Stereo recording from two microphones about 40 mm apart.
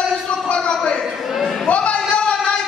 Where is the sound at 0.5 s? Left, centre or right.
Left.